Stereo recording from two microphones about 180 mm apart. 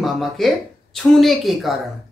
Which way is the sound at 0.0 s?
Centre (ahead or behind).